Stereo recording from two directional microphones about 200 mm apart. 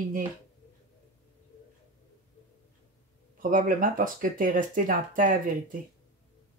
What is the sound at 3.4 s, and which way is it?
Speech, 45° right (ahead or behind).